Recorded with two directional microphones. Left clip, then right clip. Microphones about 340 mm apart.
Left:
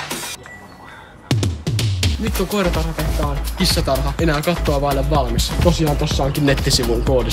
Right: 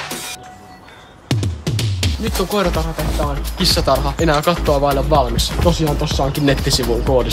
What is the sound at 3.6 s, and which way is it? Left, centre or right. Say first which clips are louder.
Speech: right 4 dB; centre.